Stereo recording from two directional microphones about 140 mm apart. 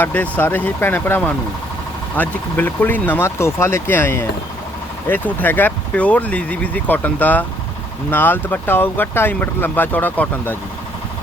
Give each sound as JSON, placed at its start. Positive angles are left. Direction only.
{"t": 0.0, "sound": "speech", "side_deg": 10}